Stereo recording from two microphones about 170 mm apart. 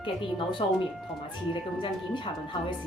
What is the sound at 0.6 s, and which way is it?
Speech, 30° left (ahead or behind).